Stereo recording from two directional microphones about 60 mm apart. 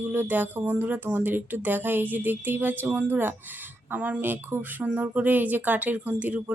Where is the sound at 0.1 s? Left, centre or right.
Right.